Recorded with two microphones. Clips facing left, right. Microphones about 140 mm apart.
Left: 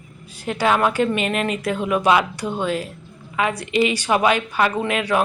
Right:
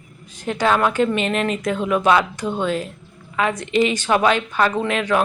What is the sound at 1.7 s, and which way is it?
A woman's voice, 10° left (ahead or behind).